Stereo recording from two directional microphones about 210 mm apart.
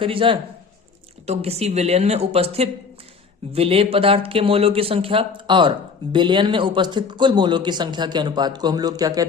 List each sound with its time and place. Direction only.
0.0 s speech: 25° right (ahead or behind)